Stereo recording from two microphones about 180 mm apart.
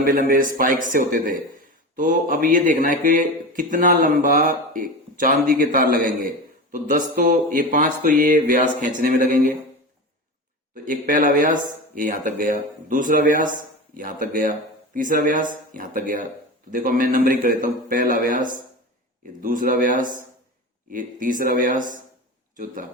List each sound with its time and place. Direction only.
0.0 s a man's voice: 50° right (ahead or behind)
10.8 s a man's voice: 50° right (ahead or behind)
20.9 s a man's voice: 50° right (ahead or behind)